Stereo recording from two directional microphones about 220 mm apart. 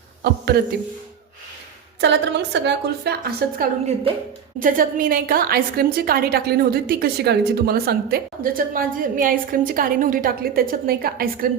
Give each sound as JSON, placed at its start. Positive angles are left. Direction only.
{"t": 2.0, "sound": "a woman's voice", "side_deg": -50}
{"t": 3.6, "sound": "a woman's voice", "side_deg": -30}